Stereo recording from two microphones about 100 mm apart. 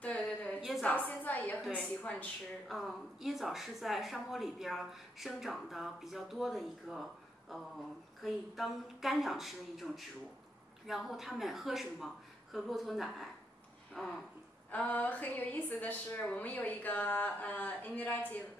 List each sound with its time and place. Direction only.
0.0 s a sound: 15° left (ahead or behind)
0.8 s a woman's voice: 15° left (ahead or behind)
2.7 s a woman's voice: centre (ahead or behind)
14.7 s speech: 15° left (ahead or behind)